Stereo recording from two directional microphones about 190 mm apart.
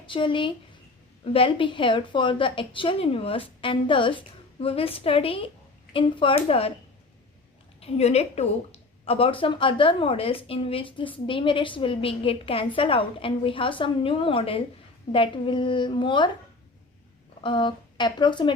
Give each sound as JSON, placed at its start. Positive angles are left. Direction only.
{"t": 0.0, "sound": "a woman's voice", "side_deg": 25}
{"t": 7.8, "sound": "a woman's voice", "side_deg": 35}
{"t": 17.4, "sound": "speech", "side_deg": 25}